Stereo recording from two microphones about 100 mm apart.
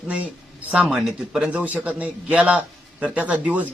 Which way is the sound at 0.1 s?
15° right (ahead or behind).